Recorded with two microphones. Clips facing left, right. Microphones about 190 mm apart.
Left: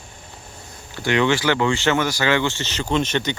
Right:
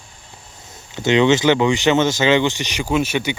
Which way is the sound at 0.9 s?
20° right (ahead or behind).